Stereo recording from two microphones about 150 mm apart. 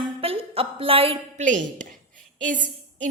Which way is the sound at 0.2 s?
40° right (ahead or behind).